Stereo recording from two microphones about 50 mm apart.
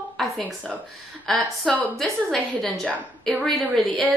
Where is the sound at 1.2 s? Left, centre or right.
Centre.